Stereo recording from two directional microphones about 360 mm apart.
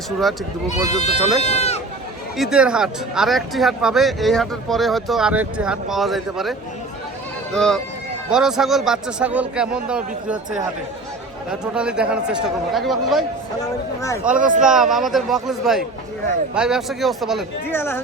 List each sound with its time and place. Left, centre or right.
0.7 s speech: centre
2.4 s speech: centre
11.6 s speech: centre
14.3 s speech: right
14.6 s speech: centre